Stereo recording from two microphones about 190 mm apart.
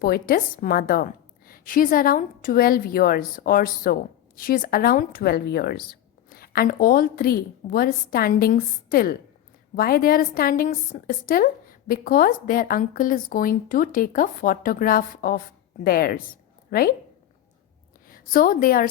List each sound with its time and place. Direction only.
0.0 s a woman's voice: 50° left (ahead or behind)
18.1 s a woman's voice: 50° left (ahead or behind)